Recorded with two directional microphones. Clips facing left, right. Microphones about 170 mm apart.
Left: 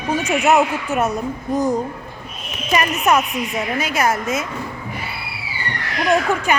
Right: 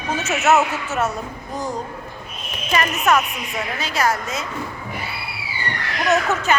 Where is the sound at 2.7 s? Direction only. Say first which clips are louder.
Left 2 dB; 20° left (ahead or behind).